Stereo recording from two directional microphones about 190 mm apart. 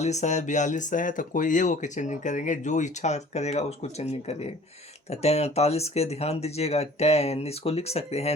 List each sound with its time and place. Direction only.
0.0 s speech: 35° left (ahead or behind)